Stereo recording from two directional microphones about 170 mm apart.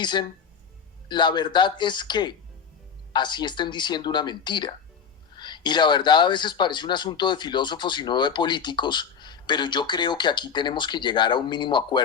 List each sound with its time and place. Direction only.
0.0 s speech: 25° left (ahead or behind)